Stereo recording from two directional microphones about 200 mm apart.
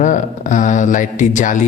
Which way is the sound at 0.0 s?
40° left (ahead or behind).